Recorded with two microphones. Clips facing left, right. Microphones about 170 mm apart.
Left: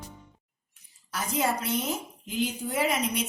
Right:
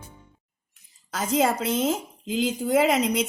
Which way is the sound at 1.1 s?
90° right.